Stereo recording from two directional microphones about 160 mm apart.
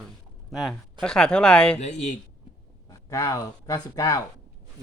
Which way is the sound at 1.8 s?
45° left (ahead or behind).